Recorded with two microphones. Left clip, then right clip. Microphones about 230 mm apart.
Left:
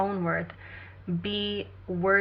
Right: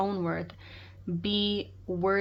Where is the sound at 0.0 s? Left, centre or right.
Right.